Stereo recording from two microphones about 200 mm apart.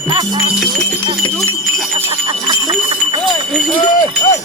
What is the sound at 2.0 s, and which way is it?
Jingle bell, 30° right (ahead or behind).